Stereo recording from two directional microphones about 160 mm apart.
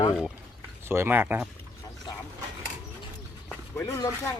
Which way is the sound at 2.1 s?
25° left (ahead or behind).